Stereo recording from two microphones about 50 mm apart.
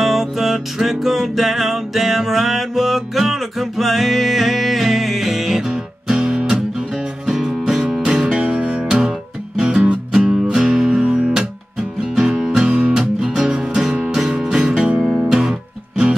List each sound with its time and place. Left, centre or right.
0.0 s music: centre
8.0 s music: right
12.6 s music: right
15.0 s music: centre
15.2 s music: centre